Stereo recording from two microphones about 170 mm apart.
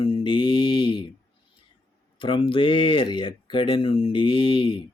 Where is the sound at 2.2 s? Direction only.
30° left (ahead or behind).